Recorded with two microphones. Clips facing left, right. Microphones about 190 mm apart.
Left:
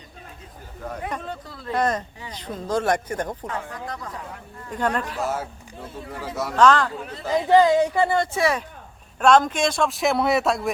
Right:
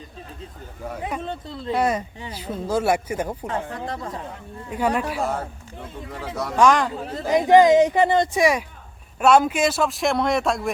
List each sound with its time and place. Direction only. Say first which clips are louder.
1.2 s a woman's voice: right 4 dB; 25° right (ahead or behind)
1.7 s speech: right 1 dB; 10° right (ahead or behind)
3.4 s a woman's voice: right 3 dB; 25° right (ahead or behind)
4.7 s speech: right 2 dB; 10° right (ahead or behind)
5.2 s speech: right 1 dB; 5° left (ahead or behind)
5.7 s speech: left 1 dB; 15° right (ahead or behind); by 10.7 s centre (ahead or behind)